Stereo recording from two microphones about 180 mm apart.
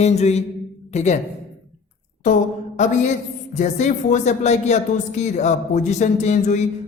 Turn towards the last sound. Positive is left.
turn(degrees=40)  # may be behind; listen again after turning